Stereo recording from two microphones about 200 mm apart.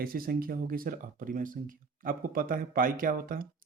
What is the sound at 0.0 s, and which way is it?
Speech, 45° right (ahead or behind).